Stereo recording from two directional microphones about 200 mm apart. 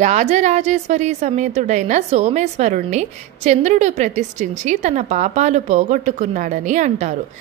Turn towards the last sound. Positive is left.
turn(degrees=-35)  # may be behind; listen again after turning